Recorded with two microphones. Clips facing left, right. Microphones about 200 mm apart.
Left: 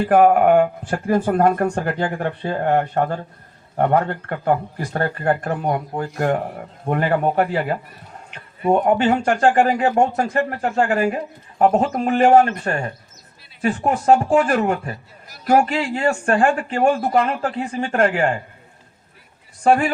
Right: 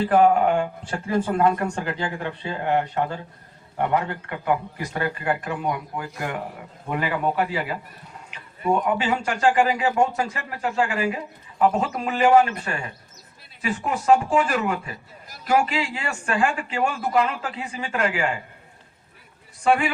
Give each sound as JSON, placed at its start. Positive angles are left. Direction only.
{"t": 0.0, "sound": "speech", "side_deg": 50}
{"t": 8.8, "sound": "speech", "side_deg": 50}
{"t": 19.6, "sound": "speech", "side_deg": 45}